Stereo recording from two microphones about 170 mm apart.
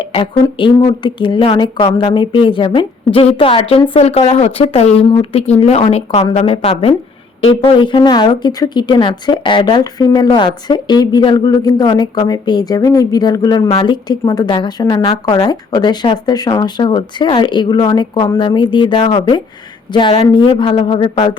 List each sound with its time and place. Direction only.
0.1 s a woman's voice: 30° left (ahead or behind)